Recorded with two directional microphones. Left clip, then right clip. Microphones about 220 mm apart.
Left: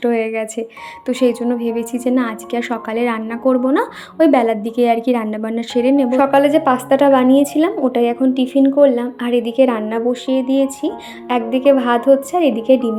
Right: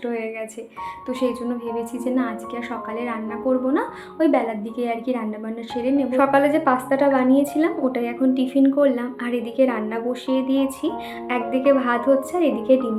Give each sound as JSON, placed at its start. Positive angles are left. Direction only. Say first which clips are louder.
{"t": 0.0, "sound": "speech", "louder": "left 9 dB", "side_deg": 40}
{"t": 6.1, "sound": "a woman's voice", "louder": "left 5 dB", "side_deg": 25}